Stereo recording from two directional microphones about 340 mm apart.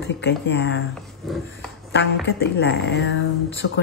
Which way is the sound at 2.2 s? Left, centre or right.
Left.